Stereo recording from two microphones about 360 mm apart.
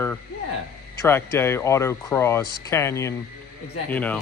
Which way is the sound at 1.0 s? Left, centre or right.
Centre.